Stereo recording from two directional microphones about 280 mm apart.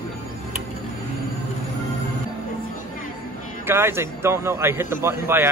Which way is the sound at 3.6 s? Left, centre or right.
Centre.